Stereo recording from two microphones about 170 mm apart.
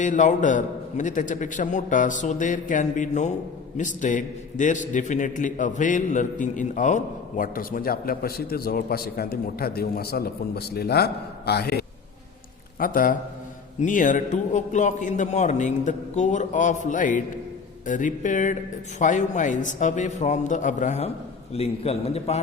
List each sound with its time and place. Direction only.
0.0 s a man's voice: 45° left (ahead or behind); by 11.9 s 70° left (ahead or behind)
12.8 s a man's voice: 55° left (ahead or behind); by 22.4 s 35° left (ahead or behind)